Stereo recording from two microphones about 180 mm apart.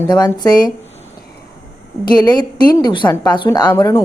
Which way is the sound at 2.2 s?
20° left (ahead or behind).